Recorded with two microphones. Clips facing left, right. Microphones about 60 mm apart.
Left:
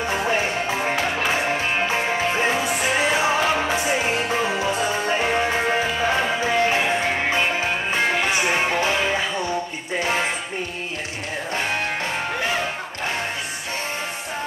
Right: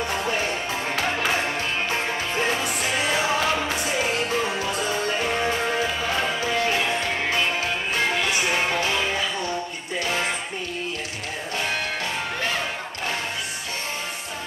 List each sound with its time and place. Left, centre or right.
0.1 s music: left
0.9 s music: centre
9.9 s music: left